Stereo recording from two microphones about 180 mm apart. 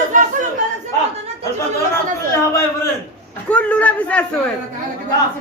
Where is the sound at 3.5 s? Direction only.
5° left (ahead or behind).